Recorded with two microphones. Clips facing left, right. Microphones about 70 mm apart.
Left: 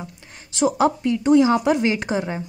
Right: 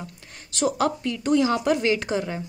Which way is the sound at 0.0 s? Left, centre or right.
Centre.